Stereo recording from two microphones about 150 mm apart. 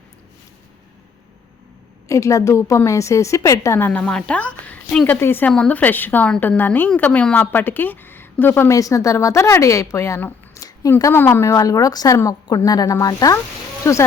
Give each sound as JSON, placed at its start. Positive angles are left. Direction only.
{"t": 2.0, "sound": "a woman's voice", "side_deg": 20}